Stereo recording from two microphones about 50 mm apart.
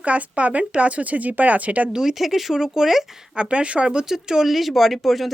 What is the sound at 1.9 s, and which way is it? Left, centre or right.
Speech, centre.